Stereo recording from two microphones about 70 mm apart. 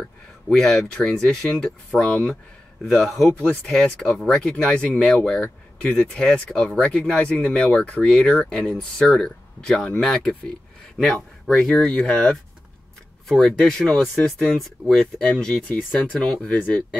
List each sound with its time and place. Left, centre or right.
0.0 s speech: centre
3.3 s speech: centre
11.4 s speech: centre